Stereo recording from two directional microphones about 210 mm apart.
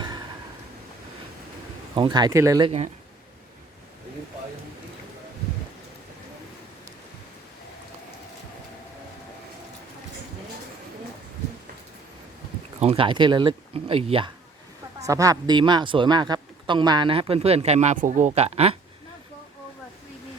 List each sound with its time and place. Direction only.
2.0 s speech: 20° right (ahead or behind)
2.6 s speech: 30° right (ahead or behind)
12.8 s speech: 25° right (ahead or behind)